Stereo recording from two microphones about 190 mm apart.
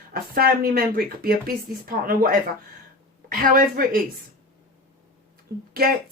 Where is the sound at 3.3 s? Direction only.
50° right (ahead or behind).